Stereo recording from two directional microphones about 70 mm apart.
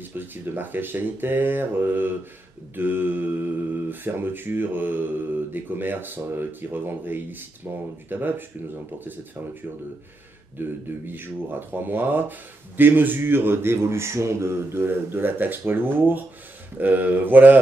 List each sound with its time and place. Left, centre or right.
0.2 s mantra: right
7.7 s speech: right
8.1 s mantra: right
10.6 s speech: right
16.7 s mantra: right